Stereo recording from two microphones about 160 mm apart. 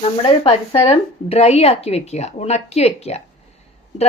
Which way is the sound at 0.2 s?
35° left (ahead or behind).